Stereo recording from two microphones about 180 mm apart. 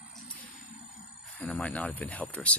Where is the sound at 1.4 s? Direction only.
10° left (ahead or behind).